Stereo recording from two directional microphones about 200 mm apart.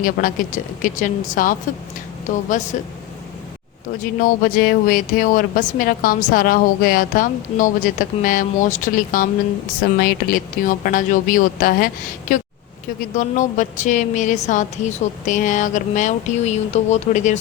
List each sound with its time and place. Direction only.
0.0 s a woman's voice: 40° left (ahead or behind)
2.7 s a woman's voice: 35° left (ahead or behind)
4.0 s speech: 45° left (ahead or behind)
13.0 s a woman's voice: 40° left (ahead or behind)